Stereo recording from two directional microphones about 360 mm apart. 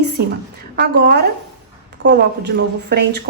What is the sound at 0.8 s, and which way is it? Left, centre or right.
Speech, right.